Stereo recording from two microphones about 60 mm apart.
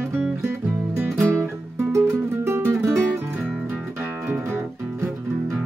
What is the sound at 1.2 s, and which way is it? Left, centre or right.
Music, right.